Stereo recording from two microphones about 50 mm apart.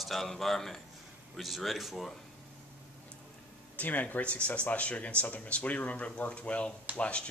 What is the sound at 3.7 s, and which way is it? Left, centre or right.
Speech, left.